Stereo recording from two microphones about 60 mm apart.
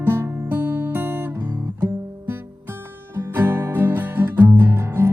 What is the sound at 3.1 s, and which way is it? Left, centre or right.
Music, right.